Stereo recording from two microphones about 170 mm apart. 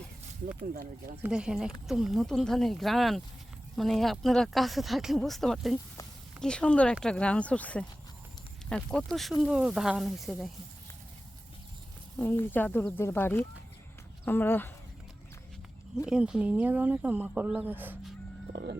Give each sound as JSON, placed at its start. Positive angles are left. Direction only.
{"t": 1.2, "sound": "speech", "side_deg": -5}
{"t": 12.2, "sound": "speech", "side_deg": 10}
{"t": 16.0, "sound": "speech", "side_deg": -5}
{"t": 18.5, "sound": "a sound", "side_deg": -80}